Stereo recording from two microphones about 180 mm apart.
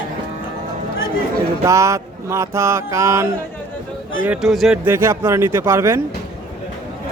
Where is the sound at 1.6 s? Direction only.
15° right (ahead or behind).